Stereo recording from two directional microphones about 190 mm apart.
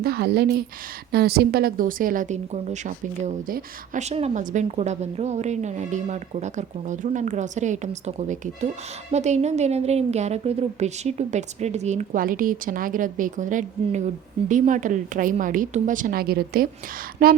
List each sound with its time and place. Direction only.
0.0 s a woman's voice: 55° right (ahead or behind)